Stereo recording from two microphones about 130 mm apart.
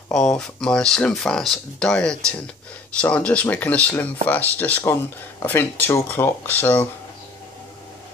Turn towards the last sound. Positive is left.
turn(degrees=15)  # may be behind; listen again after turning